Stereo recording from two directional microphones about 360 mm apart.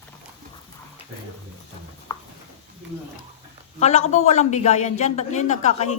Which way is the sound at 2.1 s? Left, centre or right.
Centre.